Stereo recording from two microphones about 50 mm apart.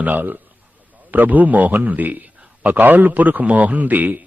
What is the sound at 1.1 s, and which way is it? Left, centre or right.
A man's voice, right.